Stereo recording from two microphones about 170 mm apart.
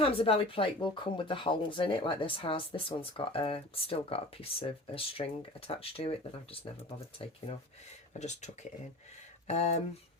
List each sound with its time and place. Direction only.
0.0 s speech: 35° left (ahead or behind)
9.5 s speech: 40° left (ahead or behind)